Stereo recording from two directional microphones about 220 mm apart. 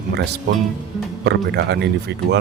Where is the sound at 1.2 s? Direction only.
50° right (ahead or behind).